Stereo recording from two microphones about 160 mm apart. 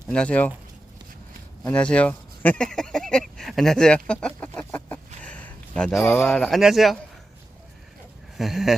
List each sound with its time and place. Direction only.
0.1 s speech: 5° left (ahead or behind)
1.6 s a man's voice: 5° left (ahead or behind)
8.4 s a man's voice: centre (ahead or behind)